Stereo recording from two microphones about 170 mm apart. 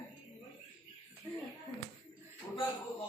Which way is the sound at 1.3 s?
20° left (ahead or behind).